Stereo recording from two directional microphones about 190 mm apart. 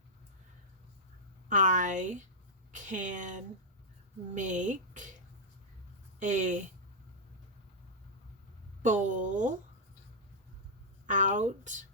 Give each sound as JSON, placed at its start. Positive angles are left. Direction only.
{"t": 1.5, "sound": "speech", "side_deg": -40}
{"t": 6.1, "sound": "speech", "side_deg": -40}
{"t": 8.8, "sound": "speech", "side_deg": -40}
{"t": 11.0, "sound": "speech", "side_deg": -40}